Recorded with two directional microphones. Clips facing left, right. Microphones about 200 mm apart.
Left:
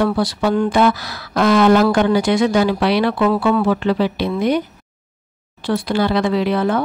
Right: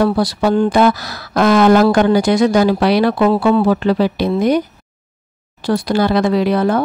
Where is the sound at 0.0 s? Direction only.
40° right (ahead or behind).